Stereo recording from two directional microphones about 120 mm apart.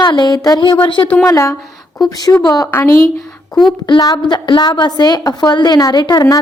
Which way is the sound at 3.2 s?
Centre (ahead or behind).